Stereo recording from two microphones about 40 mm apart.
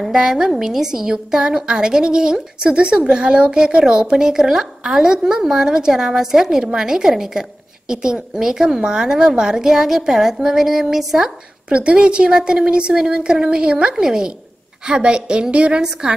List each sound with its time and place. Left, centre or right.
0.1 s a woman's voice: centre
11.7 s a woman's voice: right
15.8 s a woman's voice: centre